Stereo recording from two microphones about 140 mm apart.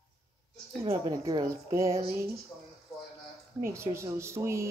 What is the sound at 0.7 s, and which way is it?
Speech, 25° right (ahead or behind).